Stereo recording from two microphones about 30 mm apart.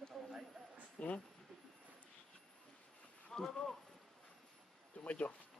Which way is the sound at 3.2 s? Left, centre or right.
Centre.